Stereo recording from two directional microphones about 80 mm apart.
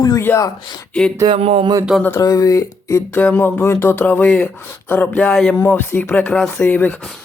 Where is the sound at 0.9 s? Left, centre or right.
Centre.